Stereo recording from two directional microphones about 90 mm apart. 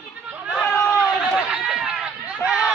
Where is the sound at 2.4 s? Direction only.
10° right (ahead or behind).